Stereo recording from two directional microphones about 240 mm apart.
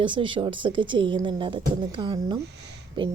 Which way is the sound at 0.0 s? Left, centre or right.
Right.